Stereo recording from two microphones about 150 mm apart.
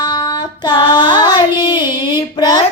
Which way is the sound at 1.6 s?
30° left (ahead or behind).